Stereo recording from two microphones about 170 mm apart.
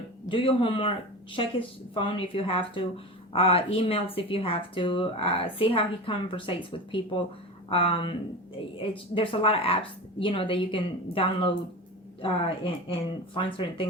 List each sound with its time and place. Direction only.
0.3 s speech: 30° left (ahead or behind)